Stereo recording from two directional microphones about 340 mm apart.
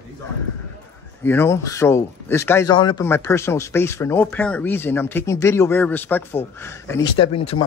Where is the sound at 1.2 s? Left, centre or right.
Centre.